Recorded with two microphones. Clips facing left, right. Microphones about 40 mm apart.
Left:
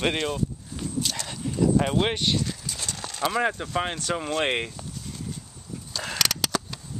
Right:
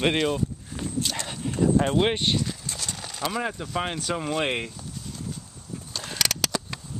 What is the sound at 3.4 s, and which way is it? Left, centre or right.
Speech, centre.